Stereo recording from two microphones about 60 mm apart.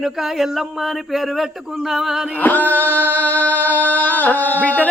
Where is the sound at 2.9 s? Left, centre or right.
Right.